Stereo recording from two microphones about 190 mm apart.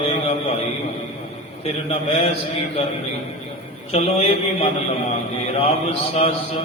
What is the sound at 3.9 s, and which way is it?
A man's voice, 30° left (ahead or behind).